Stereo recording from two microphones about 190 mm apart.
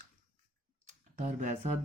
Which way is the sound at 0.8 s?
40° right (ahead or behind).